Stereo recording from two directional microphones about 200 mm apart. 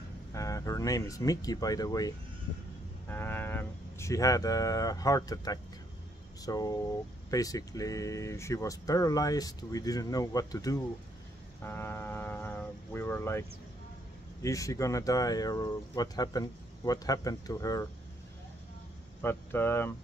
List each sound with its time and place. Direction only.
0.3 s speech: 15° left (ahead or behind)
19.2 s speech: 10° left (ahead or behind)